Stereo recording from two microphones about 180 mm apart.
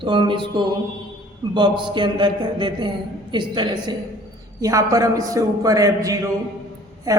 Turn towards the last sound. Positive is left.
turn(degrees=-20)  # may be behind; listen again after turning